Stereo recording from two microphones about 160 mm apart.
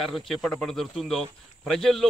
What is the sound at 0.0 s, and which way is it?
Speech, centre (ahead or behind).